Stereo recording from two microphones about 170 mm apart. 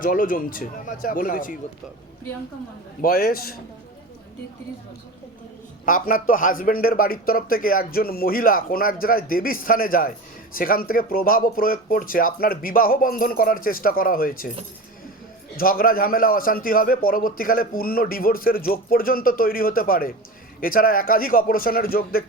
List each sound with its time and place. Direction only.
0.0 s speech: 55° left (ahead or behind)
3.0 s a man's voice: 60° left (ahead or behind)
5.8 s a man's voice: 55° left (ahead or behind)
15.5 s a man's voice: 60° left (ahead or behind)